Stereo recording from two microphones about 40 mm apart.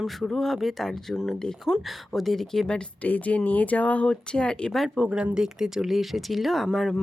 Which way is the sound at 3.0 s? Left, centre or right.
Left.